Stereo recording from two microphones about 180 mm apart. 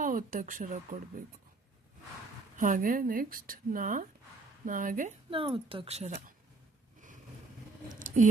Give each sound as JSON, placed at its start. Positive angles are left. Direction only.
{"t": 0.0, "sound": "speech", "side_deg": -50}
{"t": 2.6, "sound": "speech", "side_deg": -45}
{"t": 5.3, "sound": "speech", "side_deg": -30}
{"t": 7.9, "sound": "a sound", "side_deg": -45}